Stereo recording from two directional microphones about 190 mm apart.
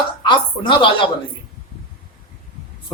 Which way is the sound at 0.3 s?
25° left (ahead or behind).